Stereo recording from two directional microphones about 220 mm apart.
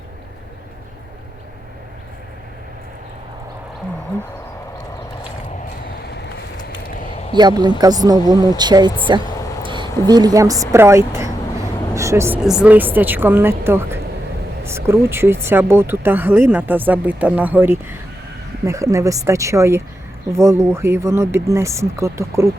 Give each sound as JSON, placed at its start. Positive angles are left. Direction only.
{"t": 7.3, "sound": "speech", "side_deg": -20}